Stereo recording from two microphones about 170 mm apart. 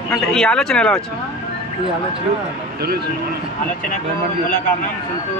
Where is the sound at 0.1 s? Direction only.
5° left (ahead or behind).